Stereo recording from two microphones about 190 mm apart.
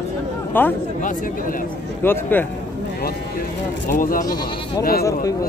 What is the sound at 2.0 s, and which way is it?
Speech, 10° left (ahead or behind).